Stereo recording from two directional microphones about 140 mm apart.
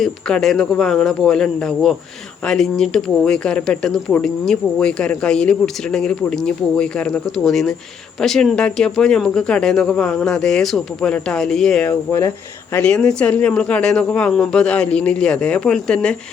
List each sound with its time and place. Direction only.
0.0 s speech: 5° left (ahead or behind)
11.9 s speech: 20° left (ahead or behind)
12.7 s speech: 5° left (ahead or behind)